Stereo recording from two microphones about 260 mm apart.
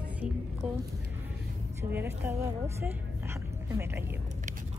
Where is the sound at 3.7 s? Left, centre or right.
Centre.